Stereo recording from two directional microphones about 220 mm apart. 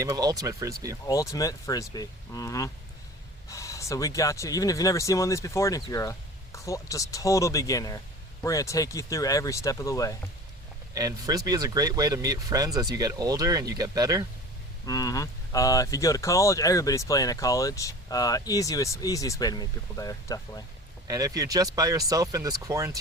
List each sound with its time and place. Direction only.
0.0 s speech: 15° right (ahead or behind)
1.0 s speech: 15° left (ahead or behind)
10.9 s speech: 15° right (ahead or behind)
14.8 s speech: 15° left (ahead or behind)
21.1 s speech: 15° right (ahead or behind)